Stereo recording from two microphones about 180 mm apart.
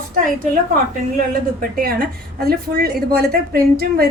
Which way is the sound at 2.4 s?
60° right (ahead or behind).